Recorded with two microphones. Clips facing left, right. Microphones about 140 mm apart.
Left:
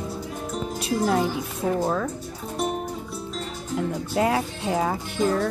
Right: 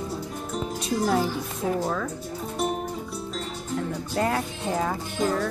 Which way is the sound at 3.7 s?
5° left (ahead or behind).